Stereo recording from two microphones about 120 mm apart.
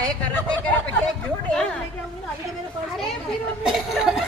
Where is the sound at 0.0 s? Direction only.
10° left (ahead or behind).